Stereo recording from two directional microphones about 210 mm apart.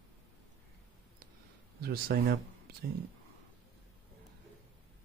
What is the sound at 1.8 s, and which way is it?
Speech, 50° right (ahead or behind).